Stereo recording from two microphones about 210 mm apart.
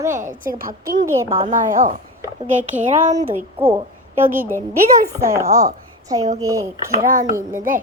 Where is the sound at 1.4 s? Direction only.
40° right (ahead or behind).